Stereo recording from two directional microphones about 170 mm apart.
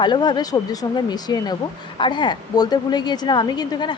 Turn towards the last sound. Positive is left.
turn(degrees=25)  # may be behind; listen again after turning